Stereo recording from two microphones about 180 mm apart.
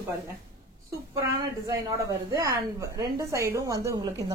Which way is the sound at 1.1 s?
15° right (ahead or behind).